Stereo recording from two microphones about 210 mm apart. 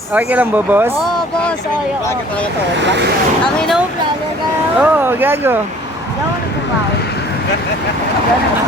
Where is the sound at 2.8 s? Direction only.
55° right (ahead or behind).